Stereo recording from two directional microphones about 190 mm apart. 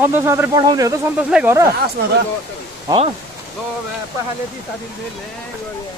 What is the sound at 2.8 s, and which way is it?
Speech, 30° right (ahead or behind).